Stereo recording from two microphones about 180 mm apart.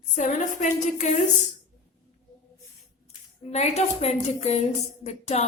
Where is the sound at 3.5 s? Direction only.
35° left (ahead or behind).